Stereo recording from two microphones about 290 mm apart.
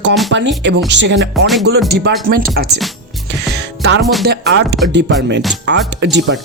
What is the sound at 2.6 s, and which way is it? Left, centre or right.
Speech, right.